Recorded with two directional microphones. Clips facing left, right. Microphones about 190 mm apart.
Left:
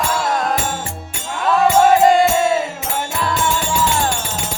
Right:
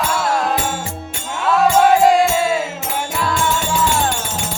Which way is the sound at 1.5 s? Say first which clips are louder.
Even; centre (ahead or behind).